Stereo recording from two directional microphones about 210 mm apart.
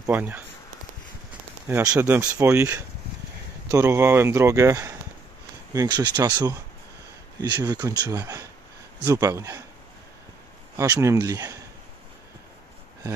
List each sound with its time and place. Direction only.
0.0 s a man's voice: 10° right (ahead or behind)
1.7 s a man's voice: 10° right (ahead or behind)
10.8 s a man's voice: 15° right (ahead or behind)